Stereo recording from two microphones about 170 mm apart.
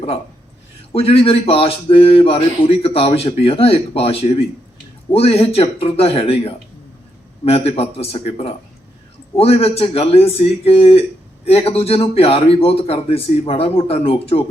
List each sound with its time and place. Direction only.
0.9 s speech: 35° left (ahead or behind)